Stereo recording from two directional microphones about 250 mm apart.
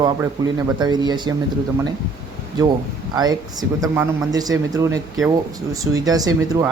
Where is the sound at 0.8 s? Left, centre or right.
Centre.